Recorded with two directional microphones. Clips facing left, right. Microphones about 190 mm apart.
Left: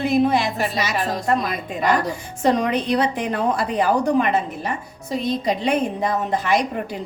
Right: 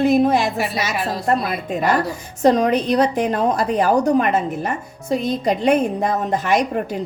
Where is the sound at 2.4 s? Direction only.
40° right (ahead or behind).